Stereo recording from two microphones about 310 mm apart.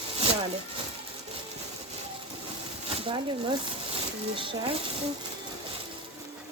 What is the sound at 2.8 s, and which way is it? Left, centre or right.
Speech, centre.